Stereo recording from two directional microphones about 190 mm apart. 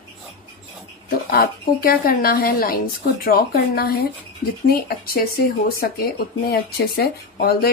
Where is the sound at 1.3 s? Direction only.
50° left (ahead or behind).